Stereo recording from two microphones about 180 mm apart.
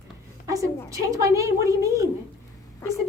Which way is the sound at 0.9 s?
15° right (ahead or behind).